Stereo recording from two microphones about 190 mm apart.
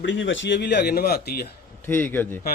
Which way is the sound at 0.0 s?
75° left (ahead or behind).